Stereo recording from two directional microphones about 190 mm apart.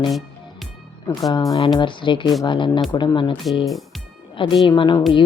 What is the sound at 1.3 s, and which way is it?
Speech, 20° left (ahead or behind).